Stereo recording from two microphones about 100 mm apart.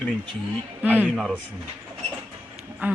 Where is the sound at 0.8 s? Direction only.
15° right (ahead or behind).